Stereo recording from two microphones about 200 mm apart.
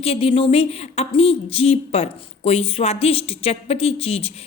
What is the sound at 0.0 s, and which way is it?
A woman's voice, 30° left (ahead or behind).